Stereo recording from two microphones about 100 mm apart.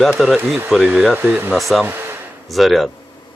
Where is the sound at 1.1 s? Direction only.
20° right (ahead or behind).